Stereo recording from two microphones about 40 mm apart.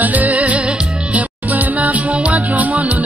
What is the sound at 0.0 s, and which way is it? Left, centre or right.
Music, right.